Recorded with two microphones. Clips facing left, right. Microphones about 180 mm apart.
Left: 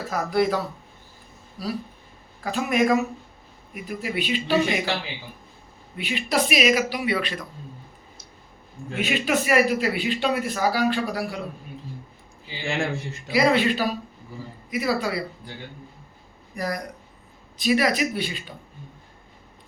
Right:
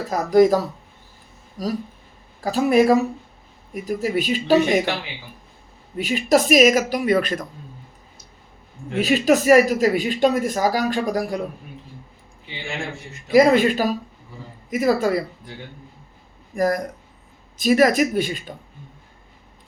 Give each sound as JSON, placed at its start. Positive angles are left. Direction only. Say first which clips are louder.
{"t": 0.1, "sound": "speech", "louder": "right 8 dB", "side_deg": -40}
{"t": 6.0, "sound": "speech", "louder": "right 6 dB", "side_deg": -40}
{"t": 9.0, "sound": "speech", "louder": "right 7 dB", "side_deg": -40}
{"t": 13.3, "sound": "speech", "louder": "right 6 dB", "side_deg": -45}
{"t": 16.6, "sound": "speech", "louder": "right 8 dB", "side_deg": -45}